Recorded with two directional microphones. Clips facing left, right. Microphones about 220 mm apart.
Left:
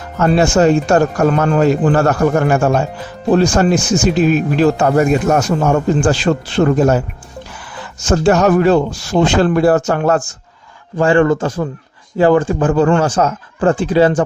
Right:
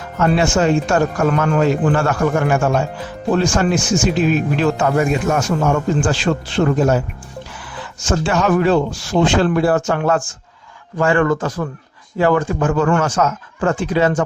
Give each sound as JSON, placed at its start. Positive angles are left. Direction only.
{"t": 0.2, "sound": "speech", "side_deg": 40}
{"t": 8.0, "sound": "speech", "side_deg": 40}